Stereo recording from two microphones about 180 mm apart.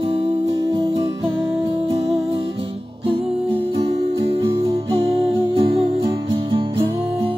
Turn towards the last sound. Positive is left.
turn(degrees=-30)  # may be behind; listen again after turning